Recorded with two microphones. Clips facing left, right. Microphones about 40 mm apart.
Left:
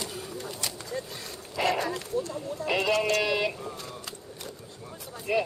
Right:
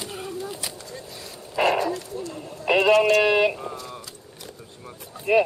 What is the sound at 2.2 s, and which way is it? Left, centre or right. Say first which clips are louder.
Speech: left 3 dB; right.